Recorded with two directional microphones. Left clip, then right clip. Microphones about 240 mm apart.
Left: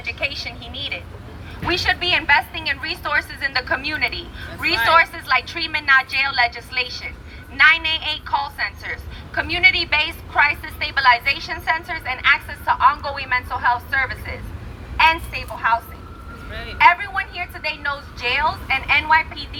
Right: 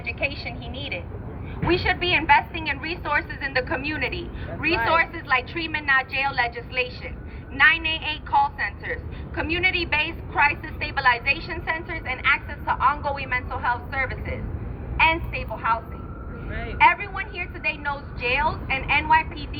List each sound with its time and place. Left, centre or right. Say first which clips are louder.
0.0 s a woman's voice: left 3 dB; centre
16.5 s vehicle: left 1 dB; left
16.7 s a woman's voice: left 4 dB; centre